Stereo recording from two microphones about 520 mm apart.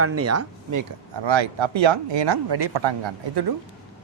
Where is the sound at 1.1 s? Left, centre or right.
Right.